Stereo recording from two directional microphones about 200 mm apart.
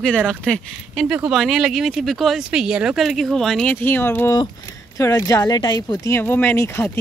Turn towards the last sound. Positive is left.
turn(degrees=10)  # may be behind; listen again after turning